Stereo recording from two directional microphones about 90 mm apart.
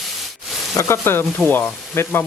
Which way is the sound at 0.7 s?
30° left (ahead or behind).